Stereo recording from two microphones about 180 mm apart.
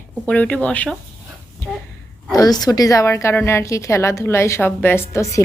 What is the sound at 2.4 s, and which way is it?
Speech, 20° left (ahead or behind).